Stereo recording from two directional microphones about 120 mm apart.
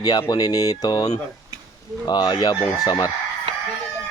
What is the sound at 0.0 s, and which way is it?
Speech, 35° left (ahead or behind).